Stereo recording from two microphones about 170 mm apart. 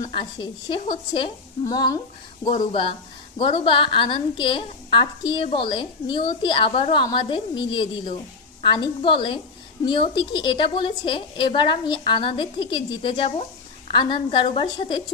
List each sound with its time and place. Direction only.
0.1 s a woman's voice: 30° left (ahead or behind)
2.4 s speech: 50° left (ahead or behind)
2.7 s a woman's voice: 30° left (ahead or behind)